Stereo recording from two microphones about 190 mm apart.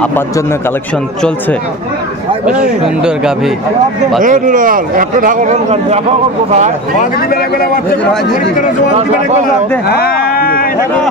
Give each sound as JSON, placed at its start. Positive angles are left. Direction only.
{"t": 2.6, "sound": "speech", "side_deg": -5}
{"t": 4.2, "sound": "speech", "side_deg": -45}
{"t": 7.0, "sound": "a man's voice", "side_deg": 50}
{"t": 9.8, "sound": "a man's voice", "side_deg": 55}